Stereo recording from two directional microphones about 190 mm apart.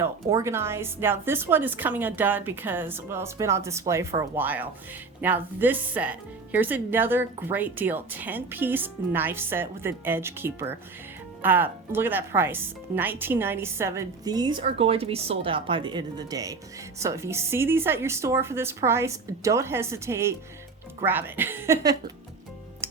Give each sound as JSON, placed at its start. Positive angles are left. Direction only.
{"t": 0.0, "sound": "a woman's voice", "side_deg": -15}
{"t": 22.8, "sound": "music", "side_deg": -15}